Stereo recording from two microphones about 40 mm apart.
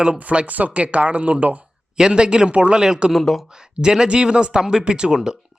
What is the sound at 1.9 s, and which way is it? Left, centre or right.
Speech, centre.